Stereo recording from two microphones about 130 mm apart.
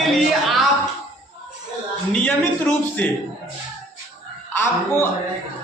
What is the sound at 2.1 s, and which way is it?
Speech, 10° left (ahead or behind).